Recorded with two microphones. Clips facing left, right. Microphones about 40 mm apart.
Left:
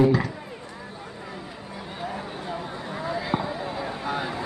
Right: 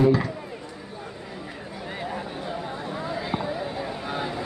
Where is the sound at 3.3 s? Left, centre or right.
Centre.